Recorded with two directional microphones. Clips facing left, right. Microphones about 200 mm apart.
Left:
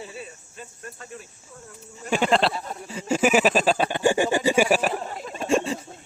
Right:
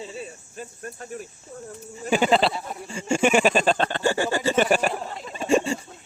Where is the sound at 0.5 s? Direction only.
45° right (ahead or behind).